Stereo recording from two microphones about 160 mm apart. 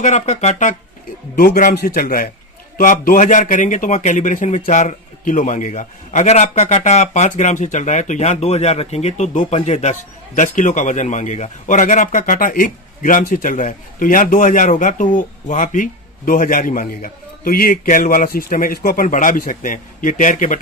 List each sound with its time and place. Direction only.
0.0 s speech: 45° left (ahead or behind)
1.4 s a man's voice: 60° left (ahead or behind)
1.7 s a man's voice: 70° left (ahead or behind); by 20.6 s 50° left (ahead or behind)